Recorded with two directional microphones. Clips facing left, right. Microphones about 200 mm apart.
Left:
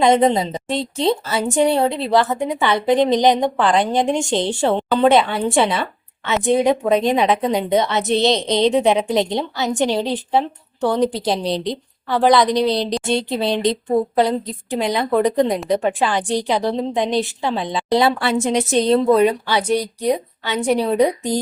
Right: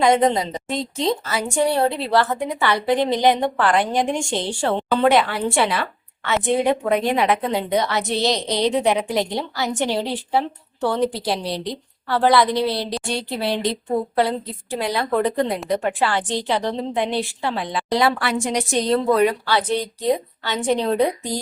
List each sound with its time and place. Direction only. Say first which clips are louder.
0.0 s a woman's voice: left 2 dB; 20° left (ahead or behind)